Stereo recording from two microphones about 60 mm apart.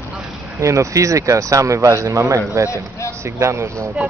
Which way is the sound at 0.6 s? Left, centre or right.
Right.